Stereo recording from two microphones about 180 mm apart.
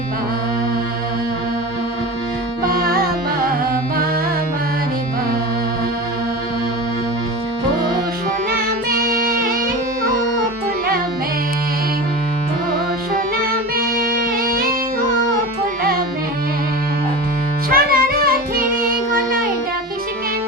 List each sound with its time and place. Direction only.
2.6 s music: 55° right (ahead or behind)
8.4 s music: 55° right (ahead or behind)
13.1 s music: 55° right (ahead or behind)
17.7 s music: 55° right (ahead or behind)